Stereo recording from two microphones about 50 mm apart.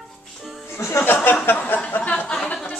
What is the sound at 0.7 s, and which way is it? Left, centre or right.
Music, left.